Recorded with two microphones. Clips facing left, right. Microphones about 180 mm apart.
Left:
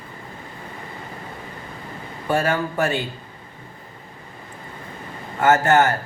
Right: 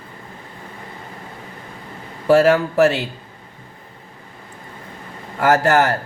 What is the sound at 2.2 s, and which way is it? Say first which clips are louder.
Speech: right 8 dB; 80° right.